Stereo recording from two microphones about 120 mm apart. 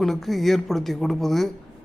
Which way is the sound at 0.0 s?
Centre (ahead or behind).